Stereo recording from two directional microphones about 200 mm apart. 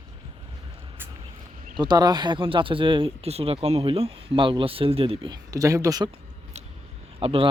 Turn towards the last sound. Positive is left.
turn(degrees=-30)  # may be behind; listen again after turning